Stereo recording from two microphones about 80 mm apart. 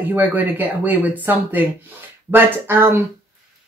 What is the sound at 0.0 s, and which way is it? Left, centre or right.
Speech, right.